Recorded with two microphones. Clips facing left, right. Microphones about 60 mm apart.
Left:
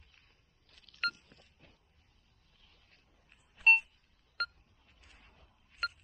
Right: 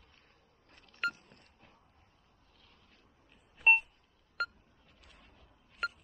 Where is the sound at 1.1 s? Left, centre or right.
Right.